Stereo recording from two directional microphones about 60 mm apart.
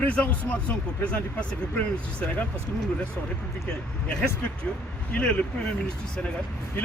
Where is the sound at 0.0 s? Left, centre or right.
Left.